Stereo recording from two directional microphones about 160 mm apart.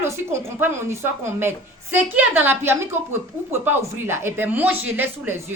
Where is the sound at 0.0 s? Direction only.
15° right (ahead or behind).